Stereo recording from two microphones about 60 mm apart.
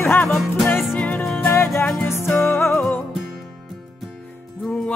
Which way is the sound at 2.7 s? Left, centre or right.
Centre.